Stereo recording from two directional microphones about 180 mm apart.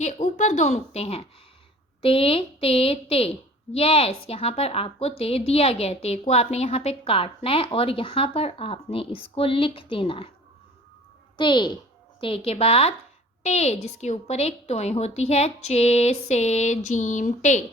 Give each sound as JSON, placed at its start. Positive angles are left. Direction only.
{"t": 0.0, "sound": "a woman's voice", "side_deg": 45}
{"t": 11.3, "sound": "a child's voice", "side_deg": 25}